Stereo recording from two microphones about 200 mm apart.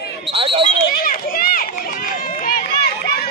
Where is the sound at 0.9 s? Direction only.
45° left (ahead or behind).